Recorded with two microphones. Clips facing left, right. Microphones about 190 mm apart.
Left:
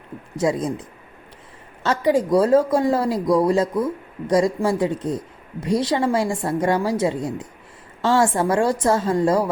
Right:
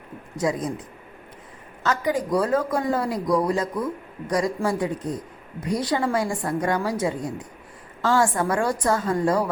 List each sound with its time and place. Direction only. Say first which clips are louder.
0.3 s speech: left 4 dB; 25° left (ahead or behind)
1.8 s speech: left 5 dB; 30° left (ahead or behind)